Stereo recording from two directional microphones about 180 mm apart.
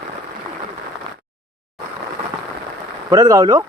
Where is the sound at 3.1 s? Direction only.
20° right (ahead or behind).